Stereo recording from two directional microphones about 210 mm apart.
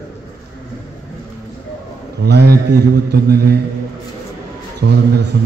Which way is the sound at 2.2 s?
50° right (ahead or behind).